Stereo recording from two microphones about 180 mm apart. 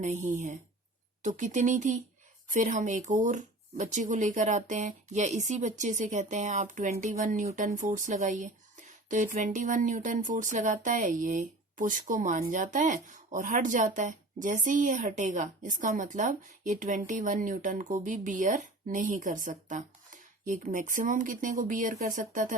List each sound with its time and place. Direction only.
0.0 s speech: 40° right (ahead or behind)